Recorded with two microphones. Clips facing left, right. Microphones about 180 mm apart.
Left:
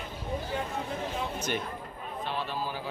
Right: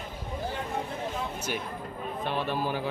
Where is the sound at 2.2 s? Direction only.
55° right (ahead or behind).